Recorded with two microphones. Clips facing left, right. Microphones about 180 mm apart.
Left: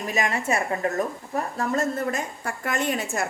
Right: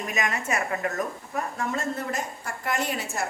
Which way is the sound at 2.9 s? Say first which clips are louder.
Left 4 dB; 50° left (ahead or behind).